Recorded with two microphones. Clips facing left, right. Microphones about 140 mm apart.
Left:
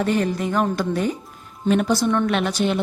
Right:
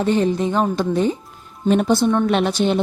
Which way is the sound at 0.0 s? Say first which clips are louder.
Right 3 dB; 25° right (ahead or behind).